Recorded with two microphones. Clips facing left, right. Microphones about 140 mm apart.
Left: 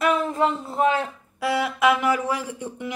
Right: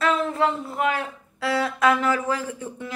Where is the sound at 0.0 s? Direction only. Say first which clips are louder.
Left 1 dB; 15° left (ahead or behind).